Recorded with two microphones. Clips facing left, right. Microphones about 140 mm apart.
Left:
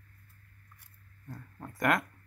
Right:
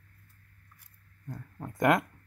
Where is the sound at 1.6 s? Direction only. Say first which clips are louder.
Right 4 dB; 20° right (ahead or behind).